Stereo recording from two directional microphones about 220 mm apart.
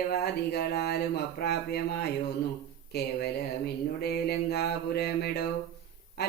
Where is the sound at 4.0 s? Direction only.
45° left (ahead or behind).